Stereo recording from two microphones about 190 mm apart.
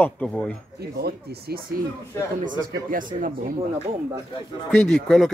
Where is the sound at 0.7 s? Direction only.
55° right (ahead or behind).